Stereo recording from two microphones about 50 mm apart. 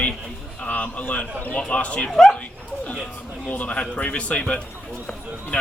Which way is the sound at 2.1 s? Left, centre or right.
Centre.